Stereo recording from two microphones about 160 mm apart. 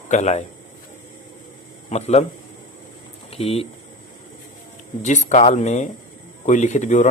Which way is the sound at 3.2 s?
40° left (ahead or behind).